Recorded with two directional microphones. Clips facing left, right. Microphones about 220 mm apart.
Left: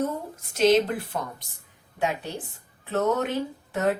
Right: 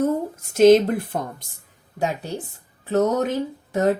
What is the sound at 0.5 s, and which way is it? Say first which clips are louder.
Speech: right 7 dB; 50° right (ahead or behind).